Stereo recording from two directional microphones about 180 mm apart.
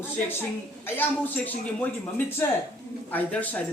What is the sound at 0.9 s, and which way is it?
A woman's voice, 10° left (ahead or behind).